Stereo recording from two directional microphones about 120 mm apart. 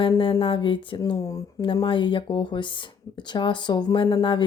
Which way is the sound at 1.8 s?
45° left (ahead or behind).